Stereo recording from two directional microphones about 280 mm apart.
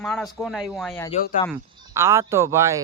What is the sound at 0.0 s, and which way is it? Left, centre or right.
Speech, centre.